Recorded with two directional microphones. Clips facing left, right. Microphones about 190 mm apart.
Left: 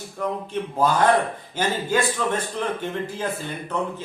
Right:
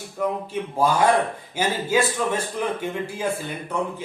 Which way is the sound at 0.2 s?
10° right (ahead or behind).